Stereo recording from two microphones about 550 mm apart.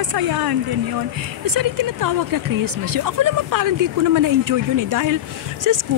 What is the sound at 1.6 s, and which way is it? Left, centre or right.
Speech, right.